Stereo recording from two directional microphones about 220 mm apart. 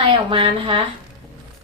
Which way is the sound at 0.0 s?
25° right (ahead or behind).